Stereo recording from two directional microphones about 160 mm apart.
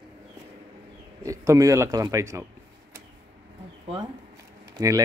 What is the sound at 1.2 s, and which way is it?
A man's voice, 20° right (ahead or behind).